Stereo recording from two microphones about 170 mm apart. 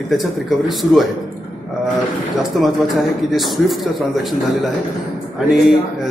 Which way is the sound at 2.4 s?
Centre (ahead or behind).